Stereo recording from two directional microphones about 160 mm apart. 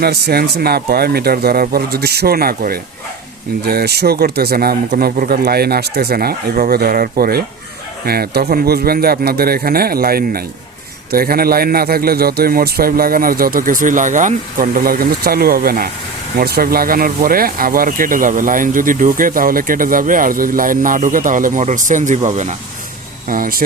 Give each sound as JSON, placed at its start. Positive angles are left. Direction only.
{"t": 0.0, "sound": "a man's voice", "side_deg": -80}
{"t": 3.6, "sound": "a man's voice", "side_deg": -80}
{"t": 23.3, "sound": "speech", "side_deg": -60}